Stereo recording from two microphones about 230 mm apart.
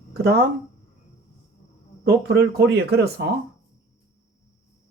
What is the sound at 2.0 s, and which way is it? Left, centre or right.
Speech, right.